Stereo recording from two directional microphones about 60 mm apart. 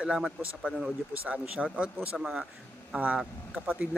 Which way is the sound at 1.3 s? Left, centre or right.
Right.